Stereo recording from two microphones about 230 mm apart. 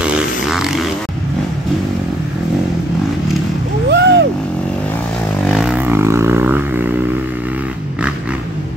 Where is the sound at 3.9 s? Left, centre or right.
Right.